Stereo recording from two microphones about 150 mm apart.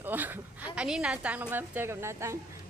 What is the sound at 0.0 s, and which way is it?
A woman's voice, 15° right (ahead or behind).